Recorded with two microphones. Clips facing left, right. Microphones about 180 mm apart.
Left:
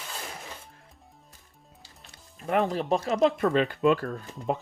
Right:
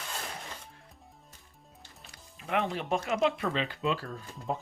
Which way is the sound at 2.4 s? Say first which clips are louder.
Left 5 dB; 40° left (ahead or behind).